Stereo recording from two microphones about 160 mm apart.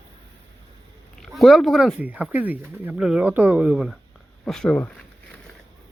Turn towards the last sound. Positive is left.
turn(degrees=10)  # may be behind; listen again after turning